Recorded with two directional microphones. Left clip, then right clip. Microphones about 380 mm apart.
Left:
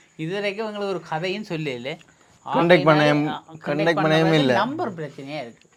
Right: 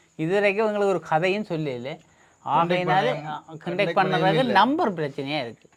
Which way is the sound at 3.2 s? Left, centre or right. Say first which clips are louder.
Left 5 dB; right.